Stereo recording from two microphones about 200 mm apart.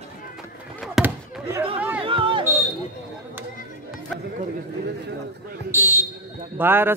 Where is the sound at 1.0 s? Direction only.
5° right (ahead or behind).